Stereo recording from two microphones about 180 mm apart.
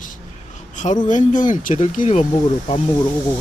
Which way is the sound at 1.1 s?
45° left (ahead or behind).